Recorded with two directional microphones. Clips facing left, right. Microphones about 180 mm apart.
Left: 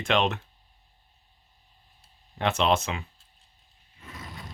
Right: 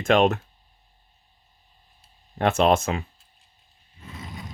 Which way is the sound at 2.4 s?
50° right (ahead or behind).